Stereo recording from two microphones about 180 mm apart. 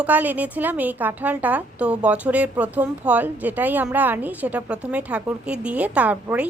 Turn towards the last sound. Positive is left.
turn(degrees=-10)  # may be behind; listen again after turning